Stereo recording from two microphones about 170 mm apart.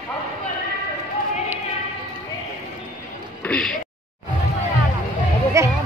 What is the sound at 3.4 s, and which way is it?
Speech, 5° left (ahead or behind).